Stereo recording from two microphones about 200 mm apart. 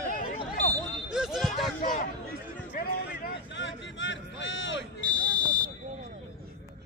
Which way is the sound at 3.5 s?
65° left (ahead or behind).